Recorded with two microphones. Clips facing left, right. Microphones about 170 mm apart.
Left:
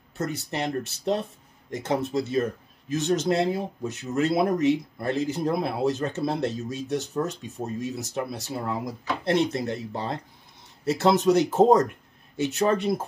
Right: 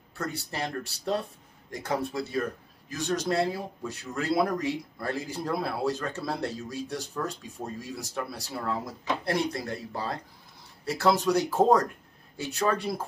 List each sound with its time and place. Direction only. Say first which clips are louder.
0.2 s speech: left 4 dB; 20° left (ahead or behind)